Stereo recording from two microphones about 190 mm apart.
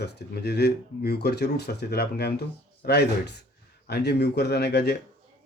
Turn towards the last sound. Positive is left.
turn(degrees=60)  # may be behind; listen again after turning